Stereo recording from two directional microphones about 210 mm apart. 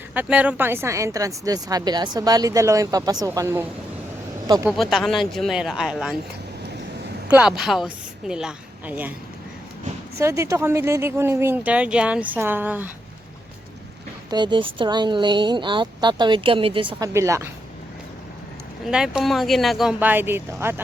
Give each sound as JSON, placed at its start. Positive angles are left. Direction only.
{"t": 0.1, "sound": "speech", "side_deg": -5}
{"t": 4.8, "sound": "speech", "side_deg": 0}
{"t": 7.3, "sound": "a woman's voice", "side_deg": -5}
{"t": 10.2, "sound": "speech", "side_deg": -15}
{"t": 14.3, "sound": "speech", "side_deg": -20}
{"t": 17.2, "sound": "speech", "side_deg": -15}
{"t": 18.9, "sound": "speech", "side_deg": -5}